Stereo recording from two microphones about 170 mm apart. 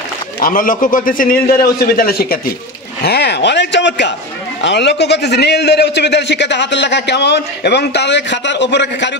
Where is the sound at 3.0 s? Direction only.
75° left (ahead or behind).